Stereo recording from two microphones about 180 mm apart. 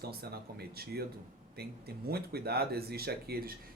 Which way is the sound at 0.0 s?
60° right (ahead or behind).